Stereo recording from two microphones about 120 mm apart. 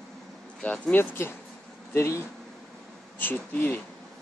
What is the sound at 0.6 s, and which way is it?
Speech, 10° left (ahead or behind).